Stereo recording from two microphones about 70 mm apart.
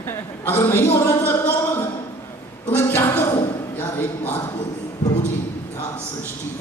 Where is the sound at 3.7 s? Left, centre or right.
Left.